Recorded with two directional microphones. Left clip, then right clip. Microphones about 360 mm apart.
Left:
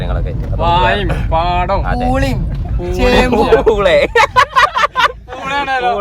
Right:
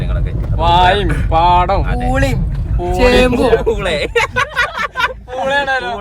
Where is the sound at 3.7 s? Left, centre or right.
Centre.